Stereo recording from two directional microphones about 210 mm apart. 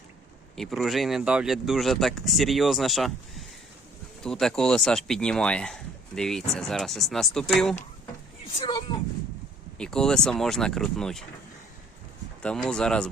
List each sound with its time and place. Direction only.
0.5 s speech: centre (ahead or behind)
8.5 s speech: 20° left (ahead or behind)
9.7 s speech: 5° left (ahead or behind)
12.4 s speech: 5° left (ahead or behind)